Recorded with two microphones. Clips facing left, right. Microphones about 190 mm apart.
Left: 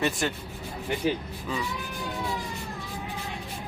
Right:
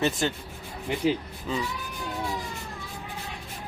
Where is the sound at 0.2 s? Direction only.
30° right (ahead or behind).